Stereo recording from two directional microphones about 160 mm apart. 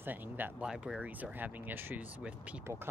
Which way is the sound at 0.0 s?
10° right (ahead or behind).